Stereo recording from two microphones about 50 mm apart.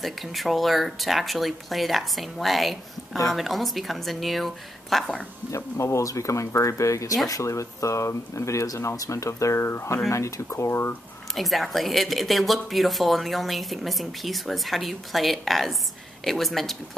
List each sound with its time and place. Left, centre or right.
0.0 s speech: centre
5.5 s speech: left
9.6 s speech: left
10.0 s speech: left
11.3 s speech: centre